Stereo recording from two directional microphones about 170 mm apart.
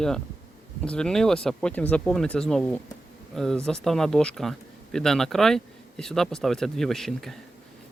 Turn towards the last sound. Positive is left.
turn(degrees=0)  # may be behind; listen again after turning